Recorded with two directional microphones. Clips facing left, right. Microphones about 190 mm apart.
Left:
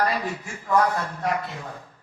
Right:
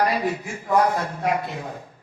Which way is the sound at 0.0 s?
15° right (ahead or behind).